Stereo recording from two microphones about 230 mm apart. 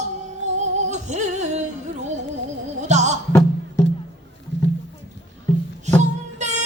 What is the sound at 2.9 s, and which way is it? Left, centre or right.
Music, right.